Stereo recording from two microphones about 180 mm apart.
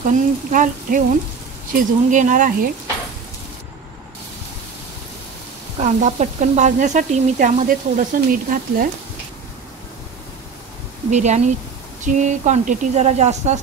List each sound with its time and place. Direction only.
0.0 s speech: 50° right (ahead or behind)
5.8 s speech: 40° right (ahead or behind)
11.1 s a woman's voice: 40° right (ahead or behind)